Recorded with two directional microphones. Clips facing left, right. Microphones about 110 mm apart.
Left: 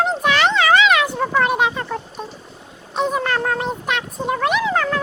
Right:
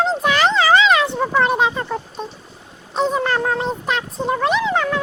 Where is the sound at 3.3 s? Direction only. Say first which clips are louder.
Right 1 dB; 15° right (ahead or behind).